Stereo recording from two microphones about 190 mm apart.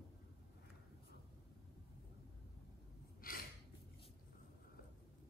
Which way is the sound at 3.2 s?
50° left (ahead or behind).